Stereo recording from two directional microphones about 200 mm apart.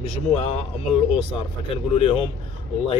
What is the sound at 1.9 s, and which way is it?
Speech, 30° left (ahead or behind).